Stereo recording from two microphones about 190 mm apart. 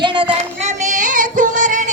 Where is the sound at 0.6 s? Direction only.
40° right (ahead or behind).